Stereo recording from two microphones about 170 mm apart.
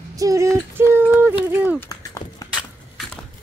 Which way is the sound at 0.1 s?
20° right (ahead or behind).